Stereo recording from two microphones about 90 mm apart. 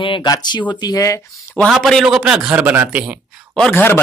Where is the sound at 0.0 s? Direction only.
65° left (ahead or behind).